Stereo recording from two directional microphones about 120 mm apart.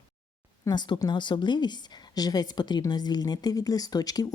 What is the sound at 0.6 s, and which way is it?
Speech, 35° left (ahead or behind).